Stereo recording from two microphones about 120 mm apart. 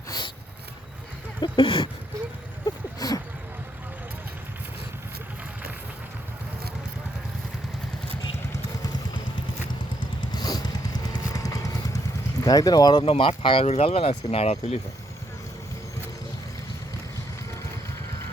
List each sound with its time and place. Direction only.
1.4 s speech: 40° left (ahead or behind)
2.6 s a sound: 30° left (ahead or behind)
10.3 s vehicle: 35° left (ahead or behind)
13.0 s speech: 50° left (ahead or behind)
13.7 s speech: 60° left (ahead or behind)